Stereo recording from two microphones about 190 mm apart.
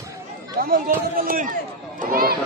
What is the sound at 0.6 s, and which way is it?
Speech, 50° right (ahead or behind).